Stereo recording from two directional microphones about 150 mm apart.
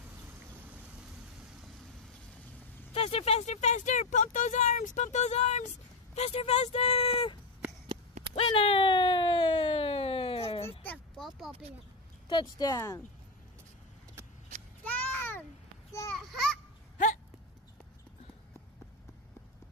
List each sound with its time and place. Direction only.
2.9 s speech: 40° left (ahead or behind)
8.4 s a sound: 40° left (ahead or behind)
10.8 s a sound: 10° left (ahead or behind)
11.2 s speech: centre (ahead or behind)
12.3 s speech: 25° left (ahead or behind)
14.9 s babbling: 10° left (ahead or behind)
16.2 s children playing: centre (ahead or behind)